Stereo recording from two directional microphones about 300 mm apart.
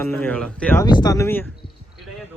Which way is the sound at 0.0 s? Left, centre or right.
Centre.